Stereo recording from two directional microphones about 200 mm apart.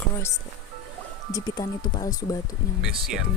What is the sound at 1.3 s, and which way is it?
Speech, 20° left (ahead or behind).